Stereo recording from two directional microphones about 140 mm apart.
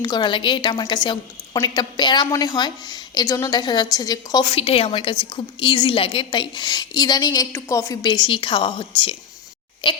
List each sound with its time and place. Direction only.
0.0 s a woman's voice: 30° left (ahead or behind)
4.5 s a woman's voice: 45° left (ahead or behind)